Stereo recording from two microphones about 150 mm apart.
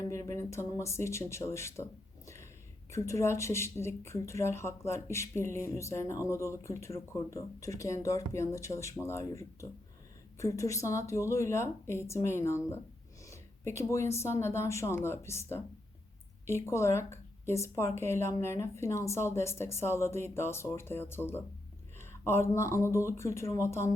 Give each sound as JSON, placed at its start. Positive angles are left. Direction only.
{"t": 0.1, "sound": "a woman's voice", "side_deg": 20}